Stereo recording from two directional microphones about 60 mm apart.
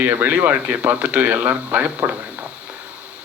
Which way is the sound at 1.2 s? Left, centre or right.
Right.